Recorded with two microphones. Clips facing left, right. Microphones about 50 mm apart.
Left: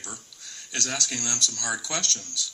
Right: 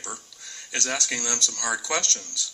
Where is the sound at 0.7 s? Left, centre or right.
Right.